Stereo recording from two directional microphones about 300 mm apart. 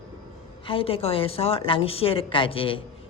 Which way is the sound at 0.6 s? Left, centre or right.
Centre.